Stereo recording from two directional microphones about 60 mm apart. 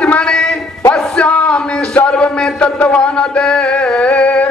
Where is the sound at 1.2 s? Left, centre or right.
Centre.